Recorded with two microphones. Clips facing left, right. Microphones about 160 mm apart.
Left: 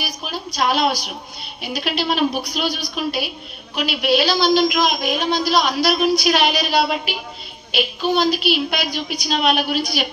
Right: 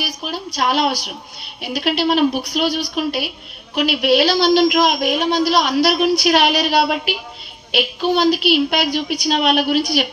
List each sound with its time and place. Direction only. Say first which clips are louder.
0.0 s a woman's voice: right 2 dB; 70° right (ahead or behind)